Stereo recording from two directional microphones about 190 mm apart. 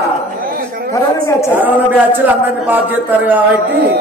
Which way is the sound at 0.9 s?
15° left (ahead or behind).